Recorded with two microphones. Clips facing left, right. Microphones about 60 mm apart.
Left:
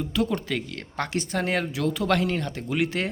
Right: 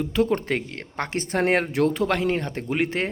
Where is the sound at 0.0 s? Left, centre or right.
Right.